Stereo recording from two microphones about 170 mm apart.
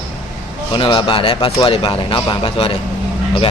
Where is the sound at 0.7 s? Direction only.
30° left (ahead or behind).